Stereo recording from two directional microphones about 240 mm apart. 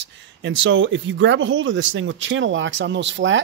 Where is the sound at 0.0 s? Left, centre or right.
Right.